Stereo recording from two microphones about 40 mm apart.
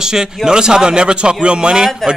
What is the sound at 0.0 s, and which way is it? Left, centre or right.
Speech, centre.